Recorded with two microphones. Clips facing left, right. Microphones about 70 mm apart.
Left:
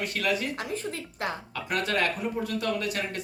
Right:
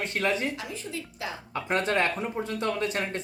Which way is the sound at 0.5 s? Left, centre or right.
Left.